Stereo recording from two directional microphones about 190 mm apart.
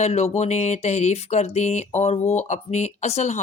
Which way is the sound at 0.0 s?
35° left (ahead or behind).